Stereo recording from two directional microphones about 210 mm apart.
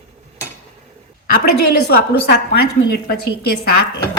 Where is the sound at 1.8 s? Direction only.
50° left (ahead or behind).